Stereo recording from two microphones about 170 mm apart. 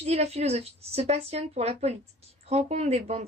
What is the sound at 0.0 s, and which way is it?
A woman's voice, 40° right (ahead or behind).